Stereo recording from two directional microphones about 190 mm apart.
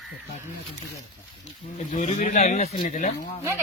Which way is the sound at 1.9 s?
40° left (ahead or behind).